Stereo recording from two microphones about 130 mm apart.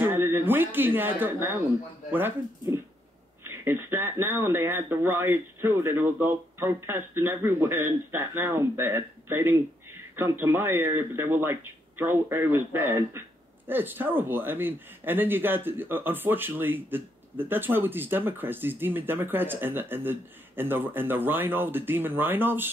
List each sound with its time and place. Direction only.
0.0 s speech: 15° right (ahead or behind)
3.4 s speech: 15° right (ahead or behind)